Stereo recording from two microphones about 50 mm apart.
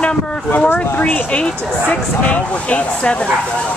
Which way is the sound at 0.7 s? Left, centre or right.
Left.